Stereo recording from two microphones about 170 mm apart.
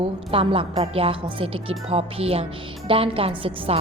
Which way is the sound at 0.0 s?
35° right (ahead or behind).